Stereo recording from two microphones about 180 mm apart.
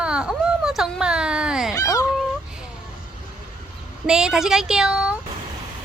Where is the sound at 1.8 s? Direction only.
20° left (ahead or behind).